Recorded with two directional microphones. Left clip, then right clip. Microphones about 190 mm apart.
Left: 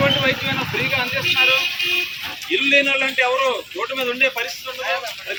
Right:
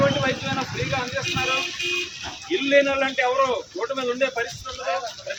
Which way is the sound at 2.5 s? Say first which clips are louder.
Left 3 dB; 20° right (ahead or behind).